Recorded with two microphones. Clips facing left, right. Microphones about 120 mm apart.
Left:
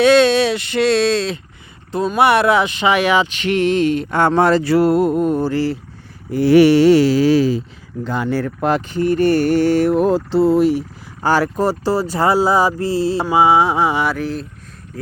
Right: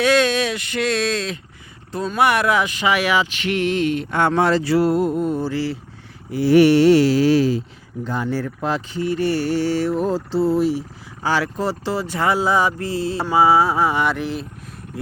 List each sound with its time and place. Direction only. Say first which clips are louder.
0.0 s speech: left 6 dB; 25° left (ahead or behind); by 5.7 s 45° left (ahead or behind)
6.5 s mantra: left 2 dB; 90° left
8.0 s speech: left 4 dB; 85° left; by 13.2 s 30° left (ahead or behind)
13.2 s a sound: left 1 dB; 15° left (ahead or behind); by 14.4 s centre (ahead or behind)